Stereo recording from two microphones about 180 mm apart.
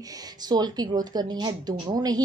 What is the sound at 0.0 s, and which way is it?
A woman's voice, 20° right (ahead or behind).